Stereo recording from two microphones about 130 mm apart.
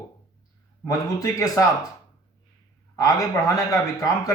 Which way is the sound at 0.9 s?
25° left (ahead or behind).